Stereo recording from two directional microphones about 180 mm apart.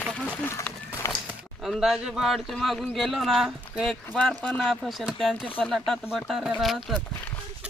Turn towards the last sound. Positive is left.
turn(degrees=0)  # may be behind; listen again after turning